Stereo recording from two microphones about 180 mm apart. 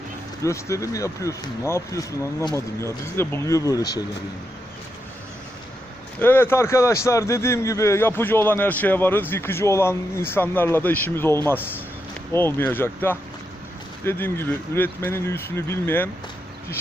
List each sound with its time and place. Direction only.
0.4 s a man's voice: 15° left (ahead or behind)
6.1 s a man's voice: 10° left (ahead or behind)